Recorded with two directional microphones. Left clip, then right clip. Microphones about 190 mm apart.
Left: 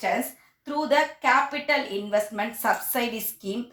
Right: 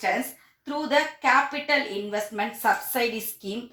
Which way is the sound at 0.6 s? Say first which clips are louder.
Left 1 dB; 45° left (ahead or behind).